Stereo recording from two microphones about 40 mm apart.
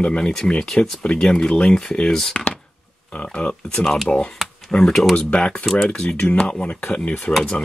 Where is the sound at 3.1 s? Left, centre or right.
Left.